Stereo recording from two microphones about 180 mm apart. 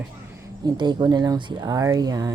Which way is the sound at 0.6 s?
25° right (ahead or behind).